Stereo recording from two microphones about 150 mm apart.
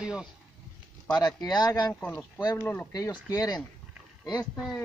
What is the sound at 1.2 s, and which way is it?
Speech, 25° left (ahead or behind).